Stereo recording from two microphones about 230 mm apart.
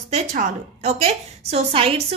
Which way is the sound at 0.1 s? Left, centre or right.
Right.